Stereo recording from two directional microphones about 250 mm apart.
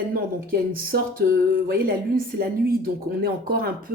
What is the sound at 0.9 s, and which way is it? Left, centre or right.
Speech, right.